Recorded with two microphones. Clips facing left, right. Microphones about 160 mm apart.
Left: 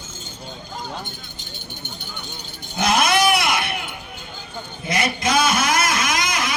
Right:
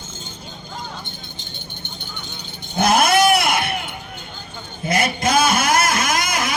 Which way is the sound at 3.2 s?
55° right (ahead or behind).